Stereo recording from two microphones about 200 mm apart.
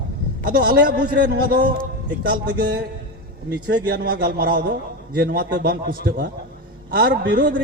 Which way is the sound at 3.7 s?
50° right (ahead or behind).